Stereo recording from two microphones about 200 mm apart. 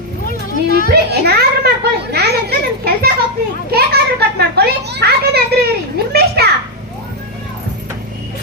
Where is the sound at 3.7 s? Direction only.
50° right (ahead or behind).